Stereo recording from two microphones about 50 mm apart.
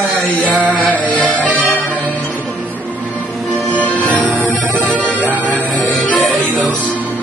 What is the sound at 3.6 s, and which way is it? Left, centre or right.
Music, left.